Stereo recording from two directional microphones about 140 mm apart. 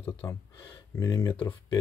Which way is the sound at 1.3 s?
35° left (ahead or behind).